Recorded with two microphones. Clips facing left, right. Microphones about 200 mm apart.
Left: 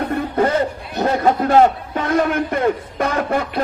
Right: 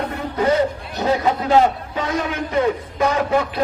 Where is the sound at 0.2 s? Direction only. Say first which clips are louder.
Right 1 dB; 55° left (ahead or behind).